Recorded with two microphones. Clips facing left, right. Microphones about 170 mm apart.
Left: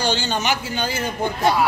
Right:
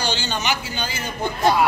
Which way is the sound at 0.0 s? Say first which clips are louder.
Left 3 dB; 50° left (ahead or behind).